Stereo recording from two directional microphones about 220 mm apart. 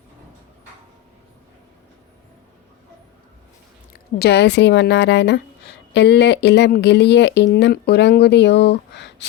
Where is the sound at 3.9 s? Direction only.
45° left (ahead or behind).